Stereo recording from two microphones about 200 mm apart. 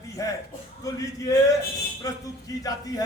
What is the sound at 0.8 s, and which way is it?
A man's voice, 15° left (ahead or behind).